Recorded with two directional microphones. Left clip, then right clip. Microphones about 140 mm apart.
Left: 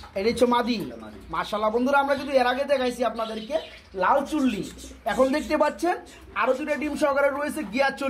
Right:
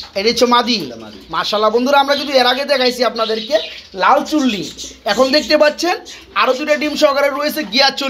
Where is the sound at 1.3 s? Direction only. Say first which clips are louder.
Right 10 dB; 20° right (ahead or behind).